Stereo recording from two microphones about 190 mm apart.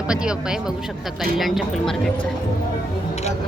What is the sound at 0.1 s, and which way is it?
Speech, 5° right (ahead or behind).